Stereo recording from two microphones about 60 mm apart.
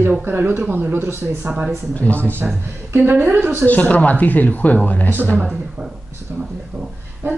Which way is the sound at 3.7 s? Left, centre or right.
Left.